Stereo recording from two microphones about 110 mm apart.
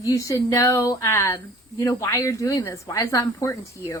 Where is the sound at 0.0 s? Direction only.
30° left (ahead or behind).